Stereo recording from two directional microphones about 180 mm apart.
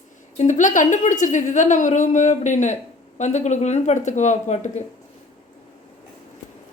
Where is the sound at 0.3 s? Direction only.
40° left (ahead or behind).